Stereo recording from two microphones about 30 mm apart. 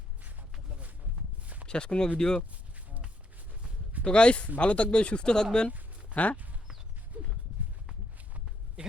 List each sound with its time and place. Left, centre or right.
1.6 s speech: left
2.1 s speech: left
4.0 s speech: left
5.2 s speech: left
6.1 s speech: right
7.1 s a sound: right
8.8 s speech: right